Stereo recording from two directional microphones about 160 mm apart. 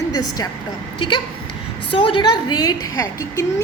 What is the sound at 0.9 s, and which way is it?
A woman's voice, 30° left (ahead or behind).